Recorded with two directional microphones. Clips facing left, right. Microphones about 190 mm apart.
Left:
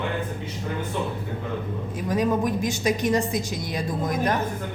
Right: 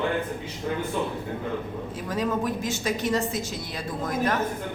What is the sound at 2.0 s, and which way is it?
Speech, 15° left (ahead or behind).